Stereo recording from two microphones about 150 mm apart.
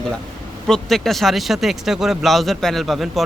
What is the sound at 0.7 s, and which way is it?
Speech, centre (ahead or behind).